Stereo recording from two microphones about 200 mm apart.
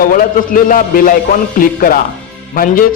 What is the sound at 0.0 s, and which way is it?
Speech, 45° left (ahead or behind).